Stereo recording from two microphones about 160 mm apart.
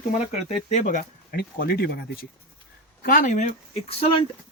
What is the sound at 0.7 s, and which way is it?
Speech, 55° left (ahead or behind).